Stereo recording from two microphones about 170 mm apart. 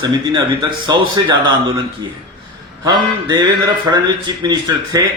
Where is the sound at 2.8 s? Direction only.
25° right (ahead or behind).